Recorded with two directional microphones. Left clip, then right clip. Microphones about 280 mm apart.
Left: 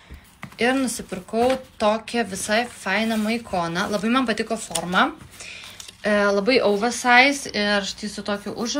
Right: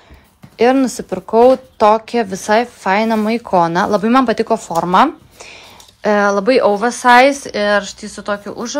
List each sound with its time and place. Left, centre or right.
0.6 s speech: centre
6.0 s speech: centre